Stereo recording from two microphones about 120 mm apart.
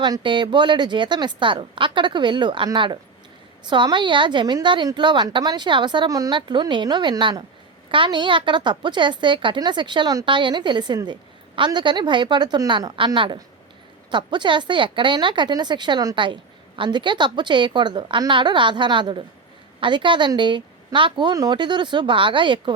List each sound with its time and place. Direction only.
0.0 s a woman's voice: 40° right (ahead or behind)
6.3 s a woman's voice: 40° right (ahead or behind)